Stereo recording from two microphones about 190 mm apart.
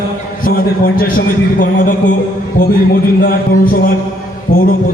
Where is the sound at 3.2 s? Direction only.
50° left (ahead or behind).